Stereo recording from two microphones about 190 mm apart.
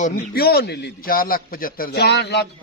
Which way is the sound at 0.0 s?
55° left (ahead or behind).